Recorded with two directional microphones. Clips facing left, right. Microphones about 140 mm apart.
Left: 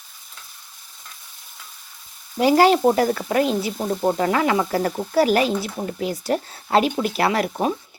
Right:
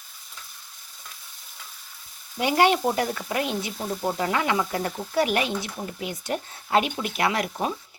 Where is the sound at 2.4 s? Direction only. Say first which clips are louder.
Left 6 dB; 35° left (ahead or behind).